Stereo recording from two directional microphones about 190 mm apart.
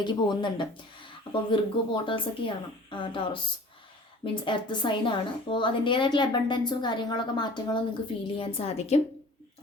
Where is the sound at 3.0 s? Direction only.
25° left (ahead or behind).